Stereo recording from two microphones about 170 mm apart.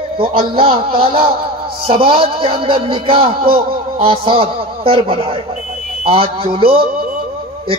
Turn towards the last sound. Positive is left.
turn(degrees=-35)  # may be behind; listen again after turning